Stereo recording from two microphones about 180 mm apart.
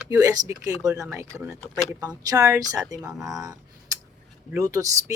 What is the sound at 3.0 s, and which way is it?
Speech, centre (ahead or behind).